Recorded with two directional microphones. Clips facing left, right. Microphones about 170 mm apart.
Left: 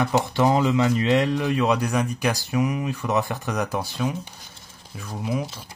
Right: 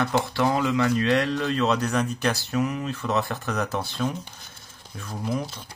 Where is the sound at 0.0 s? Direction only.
20° left (ahead or behind).